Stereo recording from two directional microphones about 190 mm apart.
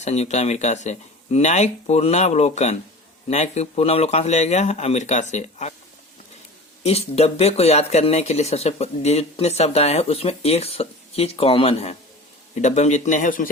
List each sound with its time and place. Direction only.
0.0 s speech: 35° left (ahead or behind)
6.8 s speech: 35° left (ahead or behind)